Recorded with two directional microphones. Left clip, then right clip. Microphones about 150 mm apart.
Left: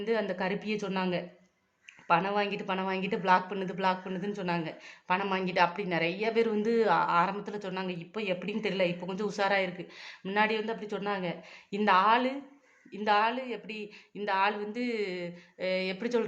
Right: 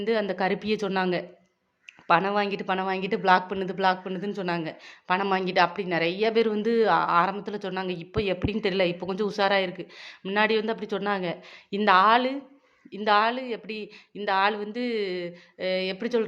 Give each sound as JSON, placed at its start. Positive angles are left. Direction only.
{"t": 0.0, "sound": "a woman's voice", "side_deg": -25}